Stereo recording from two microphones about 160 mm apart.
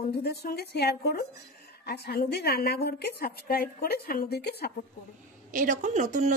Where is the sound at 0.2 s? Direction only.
85° left.